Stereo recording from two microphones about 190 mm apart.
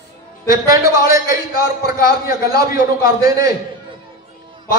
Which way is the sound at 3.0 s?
20° right (ahead or behind).